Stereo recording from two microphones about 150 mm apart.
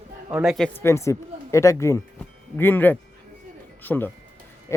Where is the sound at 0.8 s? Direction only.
20° left (ahead or behind).